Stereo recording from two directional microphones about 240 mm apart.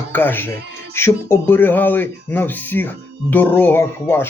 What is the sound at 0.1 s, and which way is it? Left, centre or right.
Speech, centre.